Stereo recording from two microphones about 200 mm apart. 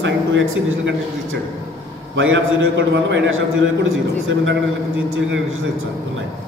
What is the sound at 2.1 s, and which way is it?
A man's voice, 75° right (ahead or behind).